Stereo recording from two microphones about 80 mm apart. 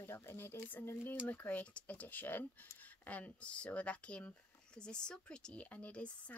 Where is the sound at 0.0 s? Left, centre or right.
Left.